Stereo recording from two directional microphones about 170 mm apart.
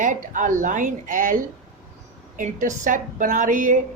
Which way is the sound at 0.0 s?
50° right (ahead or behind).